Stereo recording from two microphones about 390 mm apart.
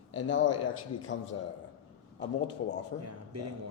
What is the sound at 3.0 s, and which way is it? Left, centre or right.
Speech, right.